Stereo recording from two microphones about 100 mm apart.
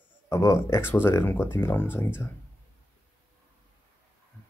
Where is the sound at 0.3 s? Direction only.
30° left (ahead or behind).